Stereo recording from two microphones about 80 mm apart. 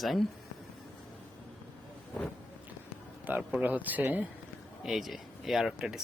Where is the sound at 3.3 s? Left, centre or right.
Right.